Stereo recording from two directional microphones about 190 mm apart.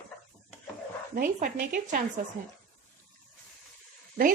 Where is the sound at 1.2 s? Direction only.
45° right (ahead or behind).